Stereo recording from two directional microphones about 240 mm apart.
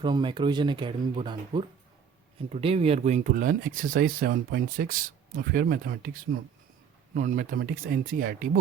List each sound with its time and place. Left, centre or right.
0.0 s speech: centre; by 8.4 s right